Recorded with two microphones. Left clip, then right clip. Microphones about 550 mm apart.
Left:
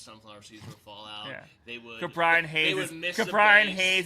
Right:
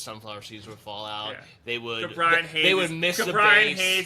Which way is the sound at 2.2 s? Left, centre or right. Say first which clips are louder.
Right 2 dB; left.